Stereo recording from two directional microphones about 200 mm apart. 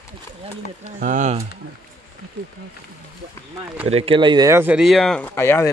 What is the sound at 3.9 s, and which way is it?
Speech, 30° right (ahead or behind).